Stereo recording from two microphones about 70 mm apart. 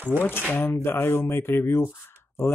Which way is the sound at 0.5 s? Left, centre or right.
Left.